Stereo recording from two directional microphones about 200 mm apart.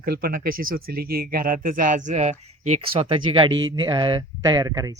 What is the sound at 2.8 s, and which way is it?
Speech, 25° right (ahead or behind).